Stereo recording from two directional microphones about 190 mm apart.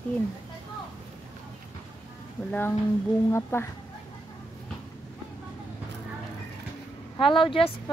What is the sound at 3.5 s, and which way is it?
Speech, 15° left (ahead or behind).